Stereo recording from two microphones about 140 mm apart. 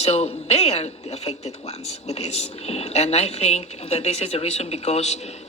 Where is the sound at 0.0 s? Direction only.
50° left (ahead or behind).